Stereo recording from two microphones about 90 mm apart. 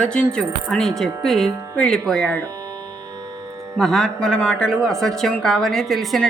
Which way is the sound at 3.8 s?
5° left (ahead or behind).